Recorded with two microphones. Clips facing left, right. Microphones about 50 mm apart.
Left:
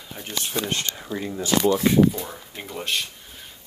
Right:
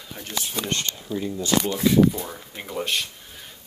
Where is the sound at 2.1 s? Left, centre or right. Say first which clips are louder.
Even; centre.